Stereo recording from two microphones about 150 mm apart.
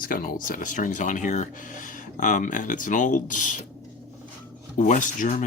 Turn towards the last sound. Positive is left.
turn(degrees=60)  # may be behind; listen again after turning